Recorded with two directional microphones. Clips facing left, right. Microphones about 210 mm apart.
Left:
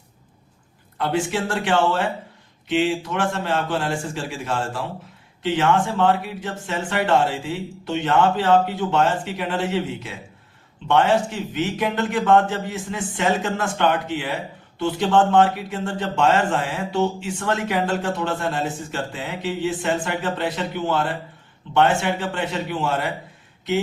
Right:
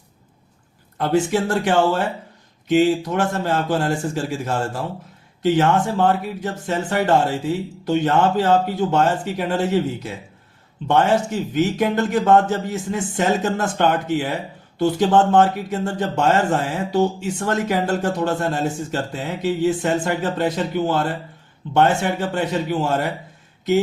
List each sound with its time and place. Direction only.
0.9 s speech: 40° right (ahead or behind)